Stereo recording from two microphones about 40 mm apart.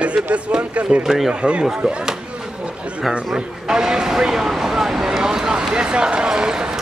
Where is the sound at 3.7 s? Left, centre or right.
Centre.